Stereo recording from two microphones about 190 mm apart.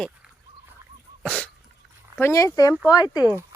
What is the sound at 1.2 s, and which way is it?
Sneeze, 5° left (ahead or behind).